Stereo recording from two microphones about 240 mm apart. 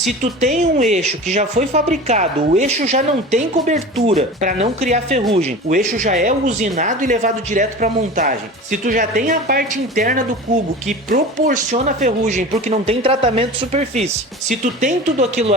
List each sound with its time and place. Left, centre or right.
0.3 s speech: right